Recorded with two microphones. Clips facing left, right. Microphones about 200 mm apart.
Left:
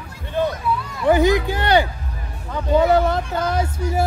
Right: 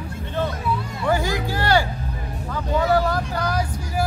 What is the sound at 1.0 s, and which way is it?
Speech, 20° left (ahead or behind).